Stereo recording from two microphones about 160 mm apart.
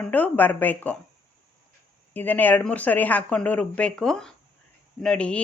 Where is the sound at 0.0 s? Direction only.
10° left (ahead or behind).